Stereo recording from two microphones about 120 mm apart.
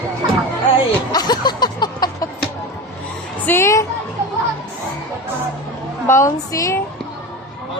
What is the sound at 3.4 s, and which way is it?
Music, 20° left (ahead or behind).